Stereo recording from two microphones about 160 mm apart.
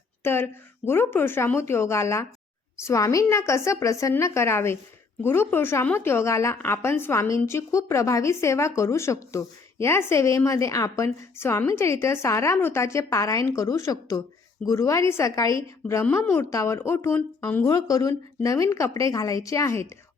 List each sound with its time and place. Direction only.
0.2 s a woman's voice: 15° left (ahead or behind)